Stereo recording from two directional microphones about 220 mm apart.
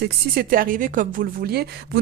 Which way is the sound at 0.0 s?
45° right (ahead or behind).